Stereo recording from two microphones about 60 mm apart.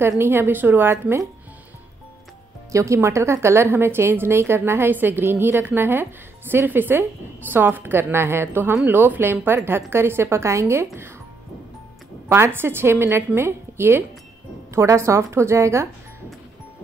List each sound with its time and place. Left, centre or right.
0.2 s a woman's voice: right
2.7 s a woman's voice: right
12.3 s a woman's voice: right